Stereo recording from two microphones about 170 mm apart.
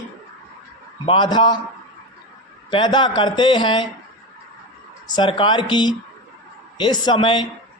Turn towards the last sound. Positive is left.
turn(degrees=25)  # may be behind; listen again after turning